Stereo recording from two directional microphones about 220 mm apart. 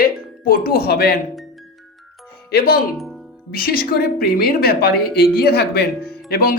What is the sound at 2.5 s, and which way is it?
Speech, 45° left (ahead or behind).